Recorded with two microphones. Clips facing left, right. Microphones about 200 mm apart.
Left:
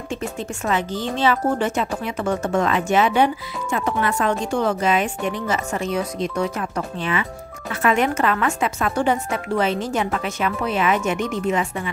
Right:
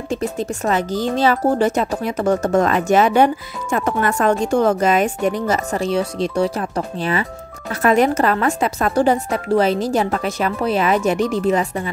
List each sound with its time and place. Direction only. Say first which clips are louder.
0.1 s speech: right 6 dB; 40° right (ahead or behind)